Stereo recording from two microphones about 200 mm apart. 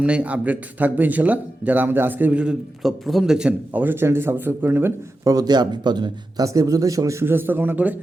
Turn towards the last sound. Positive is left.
turn(degrees=-10)  # may be behind; listen again after turning